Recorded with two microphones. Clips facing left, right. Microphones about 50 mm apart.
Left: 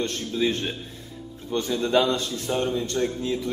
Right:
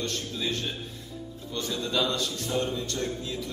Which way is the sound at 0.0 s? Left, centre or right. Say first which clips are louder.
Left 7 dB; left.